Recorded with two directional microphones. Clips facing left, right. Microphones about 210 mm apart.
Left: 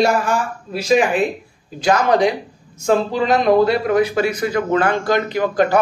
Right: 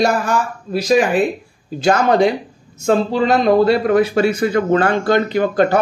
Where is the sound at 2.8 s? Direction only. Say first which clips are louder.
Right 2 dB; 30° right (ahead or behind).